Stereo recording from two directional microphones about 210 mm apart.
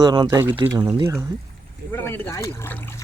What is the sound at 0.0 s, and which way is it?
Speech, 20° right (ahead or behind).